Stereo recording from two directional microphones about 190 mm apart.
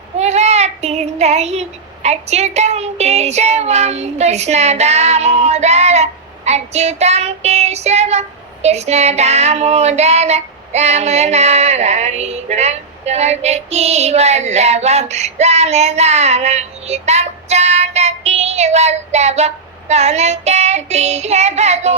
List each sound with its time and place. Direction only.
0.2 s child singing: 35° right (ahead or behind)